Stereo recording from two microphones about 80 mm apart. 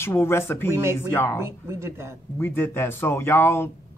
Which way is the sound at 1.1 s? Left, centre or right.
Left.